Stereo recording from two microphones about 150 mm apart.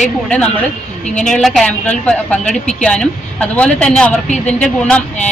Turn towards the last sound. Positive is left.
turn(degrees=10)  # may be behind; listen again after turning